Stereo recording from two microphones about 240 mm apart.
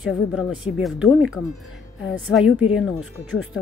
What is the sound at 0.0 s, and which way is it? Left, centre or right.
Speech, centre.